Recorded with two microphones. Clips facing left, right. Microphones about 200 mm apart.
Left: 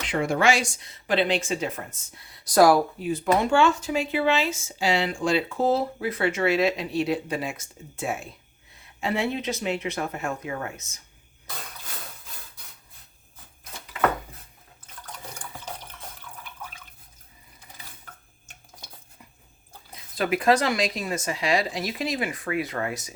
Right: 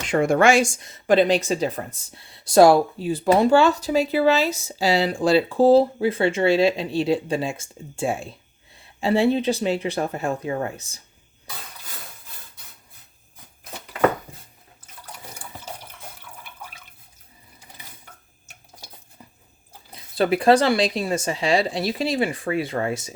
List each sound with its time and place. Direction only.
0.1 s speech: 50° right (ahead or behind); by 11.0 s 35° right (ahead or behind)
15.0 s water: 10° right (ahead or behind)
16.4 s drip: 10° right (ahead or behind)
19.9 s speech: 30° right (ahead or behind)